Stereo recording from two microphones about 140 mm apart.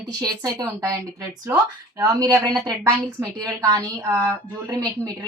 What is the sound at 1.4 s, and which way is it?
A woman's voice, 25° right (ahead or behind).